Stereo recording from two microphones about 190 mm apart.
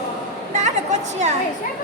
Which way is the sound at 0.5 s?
40° right (ahead or behind).